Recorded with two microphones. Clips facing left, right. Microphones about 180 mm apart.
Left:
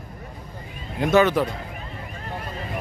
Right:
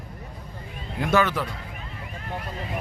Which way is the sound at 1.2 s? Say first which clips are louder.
Left 7 dB; 20° left (ahead or behind).